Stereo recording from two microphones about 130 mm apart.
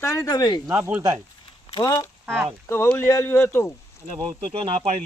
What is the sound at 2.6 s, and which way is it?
Speech, 20° left (ahead or behind).